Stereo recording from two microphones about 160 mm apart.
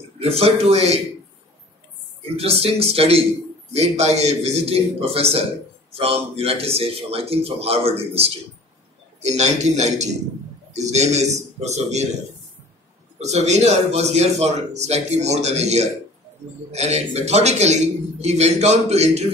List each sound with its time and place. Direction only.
0.2 s a man's voice: 40° right (ahead or behind)
2.3 s a man's voice: 40° right (ahead or behind)
13.2 s a man's voice: 45° right (ahead or behind)